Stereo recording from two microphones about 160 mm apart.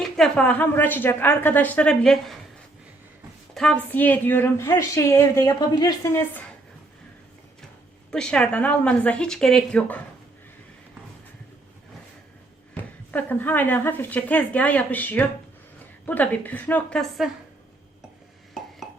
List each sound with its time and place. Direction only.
0.0 s speech: 5° left (ahead or behind)
3.5 s a woman's voice: 5° left (ahead or behind)
8.1 s speech: 5° left (ahead or behind)
12.7 s speech: 10° left (ahead or behind)